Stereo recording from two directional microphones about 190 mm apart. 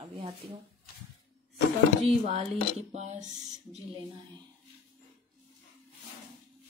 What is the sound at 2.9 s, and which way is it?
Speech, 40° right (ahead or behind).